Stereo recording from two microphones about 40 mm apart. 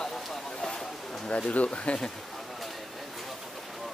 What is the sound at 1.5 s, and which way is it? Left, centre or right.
Speech, left.